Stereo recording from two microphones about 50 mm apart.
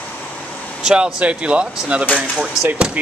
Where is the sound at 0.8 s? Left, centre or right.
Centre.